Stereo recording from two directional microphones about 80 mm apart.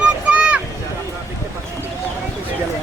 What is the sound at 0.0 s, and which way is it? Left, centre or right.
Boat, centre.